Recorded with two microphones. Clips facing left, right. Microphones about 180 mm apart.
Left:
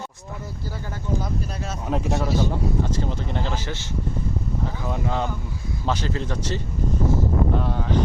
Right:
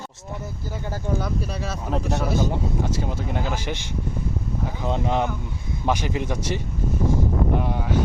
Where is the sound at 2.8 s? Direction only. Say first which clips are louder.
Even; 10° right (ahead or behind).